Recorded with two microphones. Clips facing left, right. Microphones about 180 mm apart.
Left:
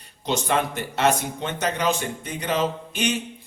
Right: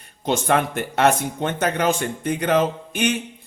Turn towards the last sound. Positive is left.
turn(degrees=-55)  # may be behind; listen again after turning